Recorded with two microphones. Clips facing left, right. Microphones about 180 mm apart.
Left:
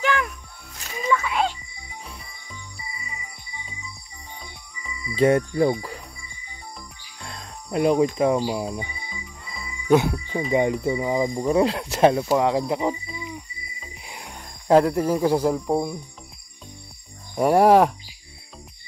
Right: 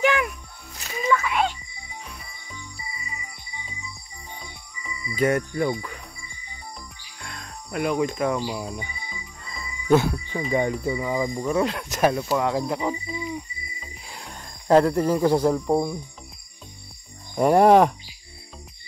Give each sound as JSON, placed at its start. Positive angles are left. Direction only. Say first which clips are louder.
{"t": 0.0, "sound": "music", "louder": "right 2 dB", "side_deg": -15}
{"t": 1.2, "sound": "music", "louder": "even", "side_deg": 30}
{"t": 5.1, "sound": "speech", "louder": "left 4 dB", "side_deg": 30}
{"t": 7.2, "sound": "music", "louder": "left 1 dB", "side_deg": 30}
{"t": 8.6, "sound": "speech", "louder": "left 3 dB", "side_deg": 25}
{"t": 9.1, "sound": "jingle bell", "louder": "left 1 dB", "side_deg": 10}
{"t": 10.5, "sound": "speech", "louder": "left 3 dB", "side_deg": 20}
{"t": 13.1, "sound": "music", "louder": "right 5 dB", "side_deg": -20}
{"t": 14.0, "sound": "speech", "louder": "left 1 dB", "side_deg": 15}
{"t": 17.4, "sound": "speech", "louder": "even", "side_deg": 5}